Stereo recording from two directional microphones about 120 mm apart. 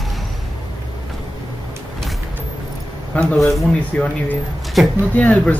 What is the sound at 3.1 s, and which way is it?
Speech, 10° left (ahead or behind).